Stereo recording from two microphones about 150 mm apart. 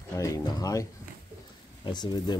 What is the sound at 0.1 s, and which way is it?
Speech, 20° left (ahead or behind).